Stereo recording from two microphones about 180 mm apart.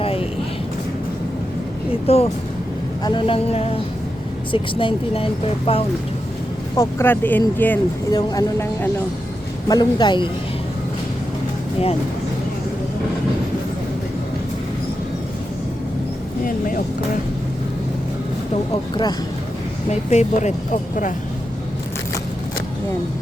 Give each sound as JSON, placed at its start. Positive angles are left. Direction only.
{"t": 1.9, "sound": "speech", "side_deg": 35}
{"t": 6.7, "sound": "speech", "side_deg": 10}
{"t": 8.1, "sound": "speech", "side_deg": 20}
{"t": 16.4, "sound": "speech", "side_deg": 50}
{"t": 18.5, "sound": "speech", "side_deg": 25}
{"t": 19.9, "sound": "speech", "side_deg": 40}